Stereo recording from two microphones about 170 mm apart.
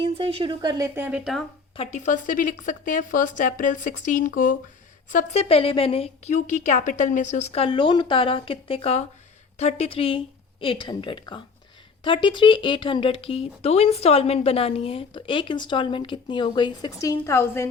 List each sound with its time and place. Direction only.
0.0 s a woman's voice: 35° right (ahead or behind)
0.9 s speech: 10° right (ahead or behind)
1.7 s a woman's voice: 40° left (ahead or behind)
5.1 s a woman's voice: 40° left (ahead or behind); by 17.7 s 15° left (ahead or behind)